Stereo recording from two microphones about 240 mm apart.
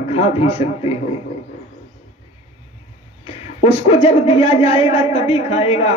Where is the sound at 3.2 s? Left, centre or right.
Left.